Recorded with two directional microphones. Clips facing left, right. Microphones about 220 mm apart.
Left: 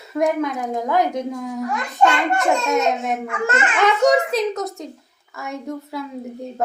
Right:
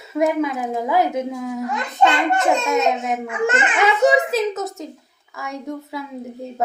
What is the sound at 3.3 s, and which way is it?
Speech, 15° right (ahead or behind).